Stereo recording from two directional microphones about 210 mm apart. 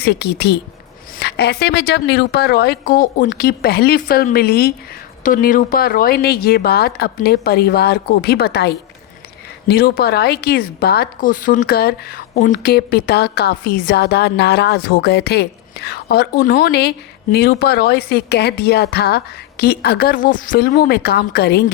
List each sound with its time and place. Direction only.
0.0 s speech: 50° left (ahead or behind)